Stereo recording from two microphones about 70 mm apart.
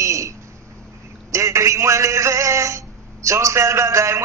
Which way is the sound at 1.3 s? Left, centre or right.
Right.